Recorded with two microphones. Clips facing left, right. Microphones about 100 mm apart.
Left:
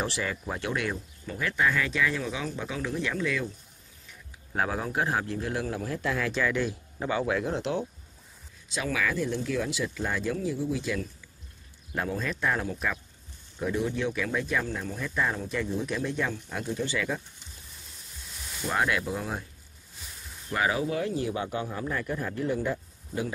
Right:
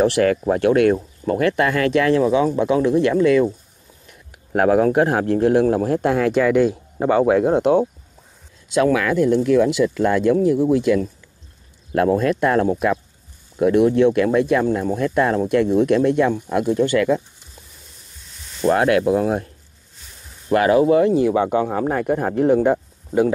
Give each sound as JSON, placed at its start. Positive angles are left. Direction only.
{"t": 0.0, "sound": "speech", "side_deg": -65}
{"t": 18.7, "sound": "speech", "side_deg": -70}
{"t": 20.5, "sound": "speech", "side_deg": -75}